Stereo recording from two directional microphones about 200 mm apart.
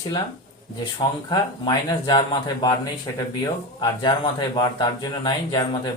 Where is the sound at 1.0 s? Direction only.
20° left (ahead or behind).